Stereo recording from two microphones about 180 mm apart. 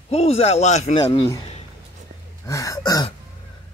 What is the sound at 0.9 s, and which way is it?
Speech, 25° left (ahead or behind).